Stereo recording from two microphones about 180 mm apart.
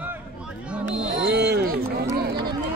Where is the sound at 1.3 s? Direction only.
65° right (ahead or behind).